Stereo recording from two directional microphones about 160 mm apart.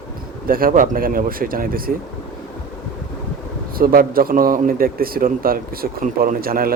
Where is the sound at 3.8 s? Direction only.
65° right (ahead or behind).